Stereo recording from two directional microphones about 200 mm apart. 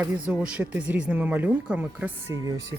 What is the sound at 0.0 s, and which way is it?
Speech, 10° right (ahead or behind).